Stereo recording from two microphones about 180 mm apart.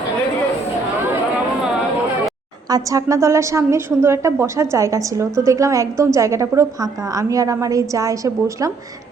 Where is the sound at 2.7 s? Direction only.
20° right (ahead or behind).